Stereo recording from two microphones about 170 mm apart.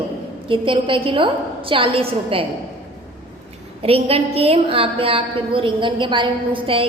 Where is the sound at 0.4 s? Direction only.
30° right (ahead or behind).